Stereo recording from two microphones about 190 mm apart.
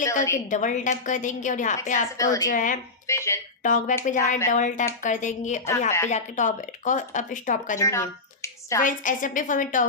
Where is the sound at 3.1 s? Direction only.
15° left (ahead or behind).